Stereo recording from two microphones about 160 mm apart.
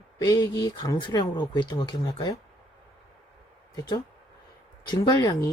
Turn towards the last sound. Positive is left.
turn(degrees=20)  # may be behind; listen again after turning